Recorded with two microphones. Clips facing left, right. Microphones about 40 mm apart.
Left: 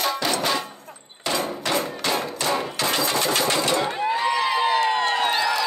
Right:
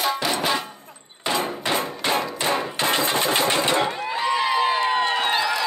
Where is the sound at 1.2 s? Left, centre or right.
Right.